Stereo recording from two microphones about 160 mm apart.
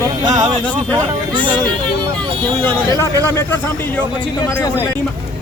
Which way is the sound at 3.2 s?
15° left (ahead or behind).